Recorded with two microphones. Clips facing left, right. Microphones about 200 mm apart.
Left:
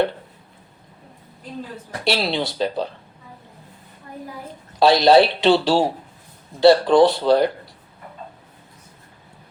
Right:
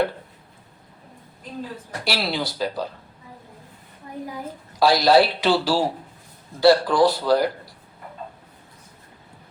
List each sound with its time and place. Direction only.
2.0 s speech: 25° left (ahead or behind)
4.8 s speech: 25° left (ahead or behind)